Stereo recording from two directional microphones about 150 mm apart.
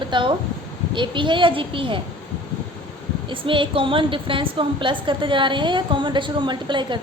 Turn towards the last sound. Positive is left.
turn(degrees=-30)  # may be behind; listen again after turning